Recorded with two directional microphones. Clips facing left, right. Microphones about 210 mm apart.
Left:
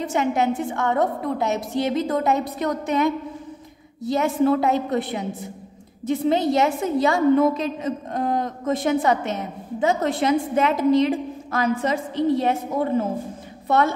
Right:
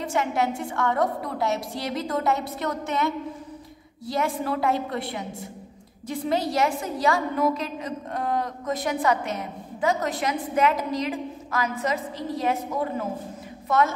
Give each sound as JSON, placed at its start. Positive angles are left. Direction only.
{"t": 0.0, "sound": "a woman's voice", "side_deg": 20}